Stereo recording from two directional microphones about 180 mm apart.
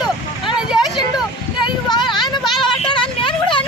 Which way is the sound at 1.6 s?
25° left (ahead or behind).